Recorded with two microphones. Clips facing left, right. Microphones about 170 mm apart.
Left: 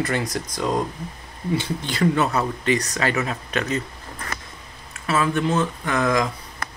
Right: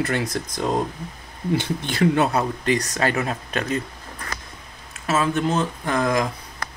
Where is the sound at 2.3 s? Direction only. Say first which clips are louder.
Even; 50° right (ahead or behind).